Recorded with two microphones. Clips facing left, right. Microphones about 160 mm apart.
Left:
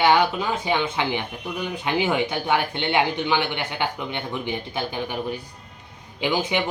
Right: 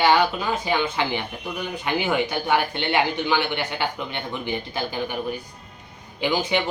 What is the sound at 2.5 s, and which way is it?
Speech, 20° left (ahead or behind).